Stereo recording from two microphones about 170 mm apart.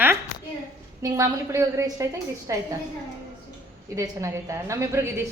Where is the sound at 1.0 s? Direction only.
15° right (ahead or behind).